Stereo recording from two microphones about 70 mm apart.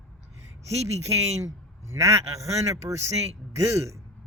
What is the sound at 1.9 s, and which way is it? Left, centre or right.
A man's voice, right.